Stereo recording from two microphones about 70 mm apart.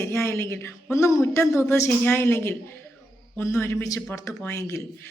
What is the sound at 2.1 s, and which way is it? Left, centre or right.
Speech, left.